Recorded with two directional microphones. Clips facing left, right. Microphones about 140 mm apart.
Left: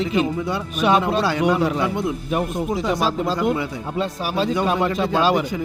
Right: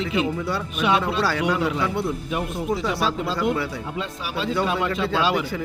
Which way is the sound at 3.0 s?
45° left (ahead or behind).